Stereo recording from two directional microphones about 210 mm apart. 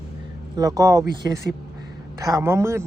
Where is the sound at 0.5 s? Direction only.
15° right (ahead or behind).